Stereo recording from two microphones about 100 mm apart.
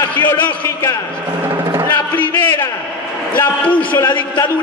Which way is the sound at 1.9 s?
20° left (ahead or behind).